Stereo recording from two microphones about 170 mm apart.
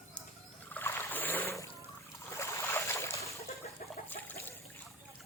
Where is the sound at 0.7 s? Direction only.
10° left (ahead or behind).